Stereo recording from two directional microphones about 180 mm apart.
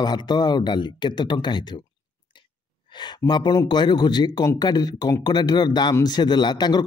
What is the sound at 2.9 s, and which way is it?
Speech, 25° left (ahead or behind).